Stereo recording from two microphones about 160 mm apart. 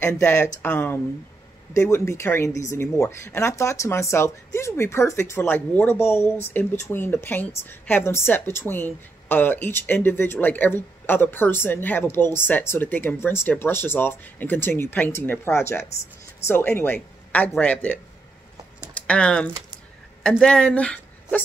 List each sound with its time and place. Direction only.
0.0 s a woman's voice: 15° left (ahead or behind)
18.9 s speech: 5° left (ahead or behind)